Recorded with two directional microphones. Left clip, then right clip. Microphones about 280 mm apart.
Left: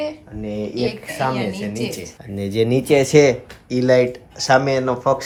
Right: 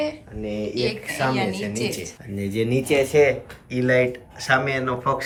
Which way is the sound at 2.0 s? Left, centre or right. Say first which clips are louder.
Left 2 dB; left.